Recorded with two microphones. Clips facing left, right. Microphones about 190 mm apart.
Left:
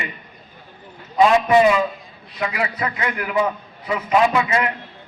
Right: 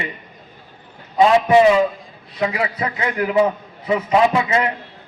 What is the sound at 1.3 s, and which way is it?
A man's voice, 25° right (ahead or behind).